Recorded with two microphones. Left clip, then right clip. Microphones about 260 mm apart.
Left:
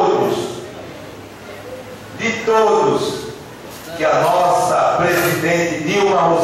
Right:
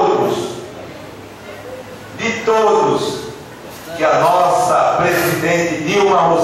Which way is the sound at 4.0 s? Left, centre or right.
Centre.